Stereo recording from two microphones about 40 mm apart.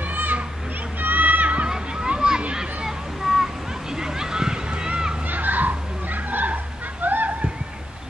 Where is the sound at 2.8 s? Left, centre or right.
Centre.